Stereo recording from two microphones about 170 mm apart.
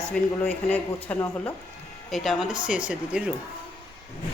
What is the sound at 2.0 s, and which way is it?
Speech, centre (ahead or behind).